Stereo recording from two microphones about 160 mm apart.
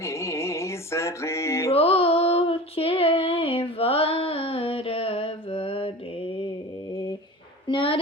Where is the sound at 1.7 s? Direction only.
40° left (ahead or behind).